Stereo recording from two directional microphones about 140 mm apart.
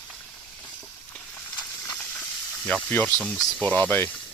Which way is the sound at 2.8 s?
10° left (ahead or behind).